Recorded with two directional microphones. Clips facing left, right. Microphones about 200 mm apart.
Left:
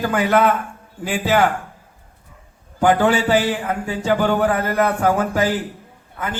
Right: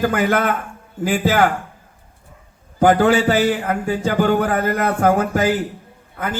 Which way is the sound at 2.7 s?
45° right (ahead or behind).